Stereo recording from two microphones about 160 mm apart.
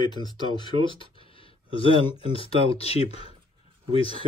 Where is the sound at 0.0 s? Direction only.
25° left (ahead or behind).